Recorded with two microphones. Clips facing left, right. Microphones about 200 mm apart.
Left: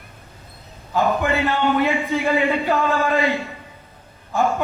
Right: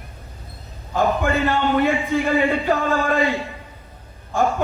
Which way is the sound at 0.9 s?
50° right (ahead or behind).